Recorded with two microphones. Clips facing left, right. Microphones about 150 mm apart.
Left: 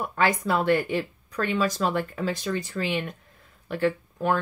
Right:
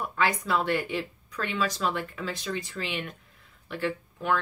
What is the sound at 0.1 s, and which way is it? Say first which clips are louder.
Speech: left 3 dB; 45° left (ahead or behind).